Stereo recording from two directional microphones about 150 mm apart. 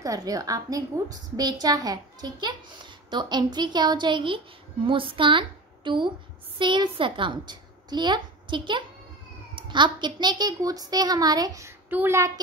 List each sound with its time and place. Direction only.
0.0 s a woman's voice: 25° right (ahead or behind)